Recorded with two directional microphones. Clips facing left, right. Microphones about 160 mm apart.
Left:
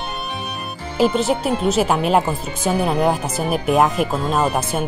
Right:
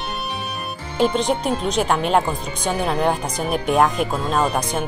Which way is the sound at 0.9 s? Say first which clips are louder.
Left 2 dB; 5° left (ahead or behind).